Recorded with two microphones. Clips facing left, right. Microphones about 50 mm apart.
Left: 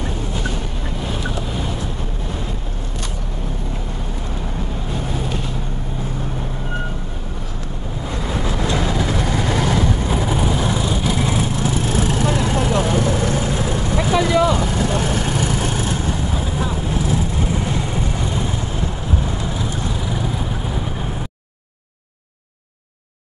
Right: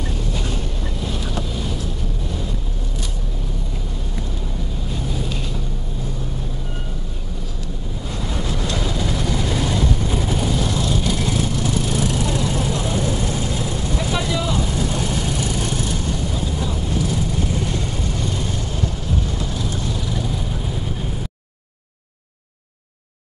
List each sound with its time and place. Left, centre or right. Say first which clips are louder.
8.7 s vehicle: left 3 dB; left
9.8 s vehicle: left 2 dB; left